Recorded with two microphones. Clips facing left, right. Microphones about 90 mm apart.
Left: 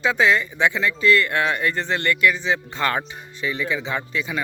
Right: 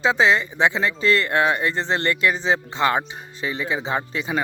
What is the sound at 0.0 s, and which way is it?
Speech, 25° right (ahead or behind).